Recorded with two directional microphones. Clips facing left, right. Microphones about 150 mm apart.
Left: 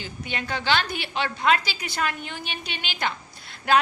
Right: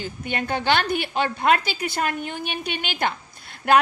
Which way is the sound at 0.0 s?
50° right (ahead or behind).